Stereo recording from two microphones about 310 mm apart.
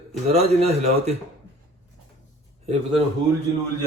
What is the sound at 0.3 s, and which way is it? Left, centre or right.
Speech, centre.